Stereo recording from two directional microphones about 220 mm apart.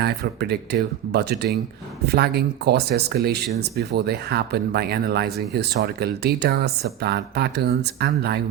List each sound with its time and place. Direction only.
0.0 s speech: 45° right (ahead or behind)